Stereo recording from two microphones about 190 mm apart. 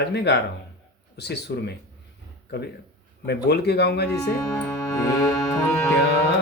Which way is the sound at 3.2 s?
60° left (ahead or behind).